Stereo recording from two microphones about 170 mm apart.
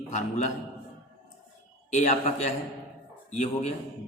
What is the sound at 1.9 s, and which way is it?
A man's voice, 40° left (ahead or behind).